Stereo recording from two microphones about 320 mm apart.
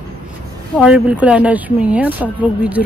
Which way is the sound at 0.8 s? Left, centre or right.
Centre.